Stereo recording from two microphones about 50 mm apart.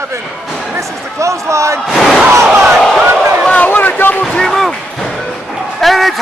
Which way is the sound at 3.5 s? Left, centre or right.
Left.